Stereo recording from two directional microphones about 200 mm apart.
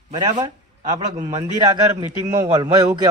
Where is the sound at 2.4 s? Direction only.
20° right (ahead or behind).